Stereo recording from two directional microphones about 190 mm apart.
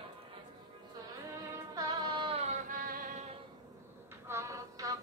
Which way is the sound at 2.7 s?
45° right (ahead or behind).